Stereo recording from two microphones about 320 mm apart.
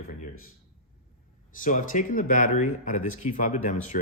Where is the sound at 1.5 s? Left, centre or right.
Left.